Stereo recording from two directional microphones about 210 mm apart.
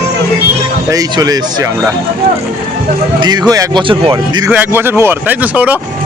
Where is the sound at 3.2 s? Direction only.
20° right (ahead or behind).